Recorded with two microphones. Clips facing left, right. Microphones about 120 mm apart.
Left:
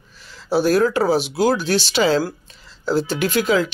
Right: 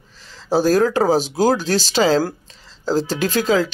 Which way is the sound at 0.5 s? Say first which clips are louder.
Right 1 dB; 35° right (ahead or behind).